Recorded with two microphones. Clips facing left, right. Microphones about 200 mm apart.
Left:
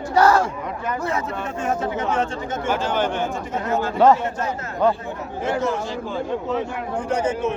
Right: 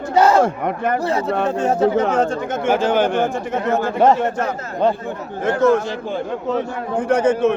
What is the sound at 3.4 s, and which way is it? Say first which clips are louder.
Speech: right 4 dB; 50° right (ahead or behind).